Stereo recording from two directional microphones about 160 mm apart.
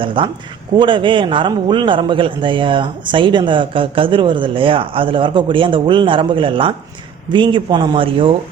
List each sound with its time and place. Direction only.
0.0 s a man's voice: 30° right (ahead or behind)